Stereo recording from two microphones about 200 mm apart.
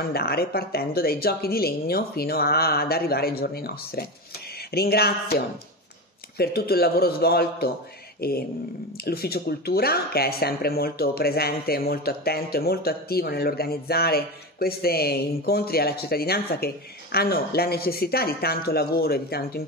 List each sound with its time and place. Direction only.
0.0 s speech: 50° left (ahead or behind)